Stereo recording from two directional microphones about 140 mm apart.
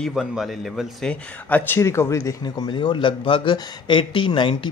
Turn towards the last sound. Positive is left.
turn(degrees=35)  # may be behind; listen again after turning